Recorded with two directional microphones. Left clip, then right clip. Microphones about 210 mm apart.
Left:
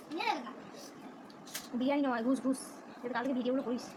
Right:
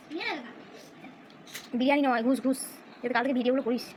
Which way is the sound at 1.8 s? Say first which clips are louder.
Right 7 dB; 15° right (ahead or behind).